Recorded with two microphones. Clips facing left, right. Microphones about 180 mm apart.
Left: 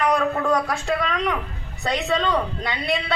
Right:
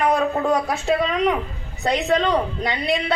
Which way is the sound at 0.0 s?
20° right (ahead or behind).